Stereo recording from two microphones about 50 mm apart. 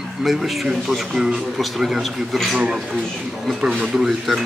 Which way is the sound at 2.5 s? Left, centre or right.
Centre.